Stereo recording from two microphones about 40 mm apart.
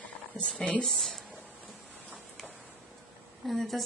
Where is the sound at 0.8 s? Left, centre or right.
Centre.